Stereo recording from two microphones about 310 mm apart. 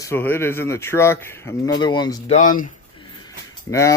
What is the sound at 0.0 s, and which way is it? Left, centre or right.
Speech, centre.